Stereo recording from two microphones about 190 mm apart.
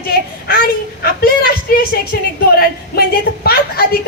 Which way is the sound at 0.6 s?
55° left (ahead or behind).